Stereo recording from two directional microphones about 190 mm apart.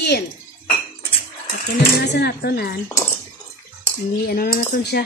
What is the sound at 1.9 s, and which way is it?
Speech, 60° left (ahead or behind).